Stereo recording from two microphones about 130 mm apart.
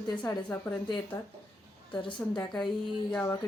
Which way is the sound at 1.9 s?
40° left (ahead or behind).